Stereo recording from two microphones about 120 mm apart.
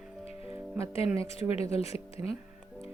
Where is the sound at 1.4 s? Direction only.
60° left (ahead or behind).